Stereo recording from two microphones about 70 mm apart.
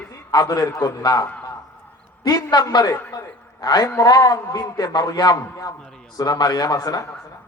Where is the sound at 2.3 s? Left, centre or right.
Left.